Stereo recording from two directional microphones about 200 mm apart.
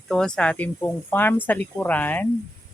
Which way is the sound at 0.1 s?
5° left (ahead or behind).